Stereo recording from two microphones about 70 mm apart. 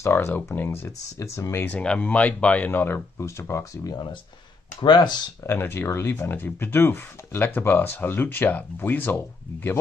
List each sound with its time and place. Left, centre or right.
0.0 s speech: left
1.7 s speech: centre; by 3.0 s left
3.2 s speech: left
4.8 s speech: left
5.5 s speech: left